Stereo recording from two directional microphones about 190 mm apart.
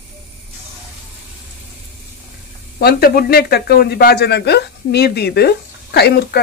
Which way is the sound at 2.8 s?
55° left (ahead or behind).